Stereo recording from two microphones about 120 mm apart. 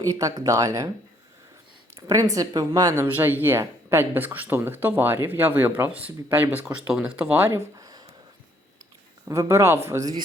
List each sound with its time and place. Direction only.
0.0 s a man's voice: 30° right (ahead or behind)
2.0 s speech: 30° right (ahead or behind); by 7.5 s 10° right (ahead or behind)
7.5 s a sound: 30° right (ahead or behind)
9.3 s a man's voice: 25° right (ahead or behind)